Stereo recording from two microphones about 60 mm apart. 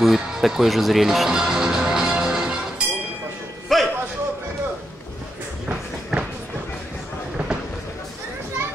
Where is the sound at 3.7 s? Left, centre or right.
Centre.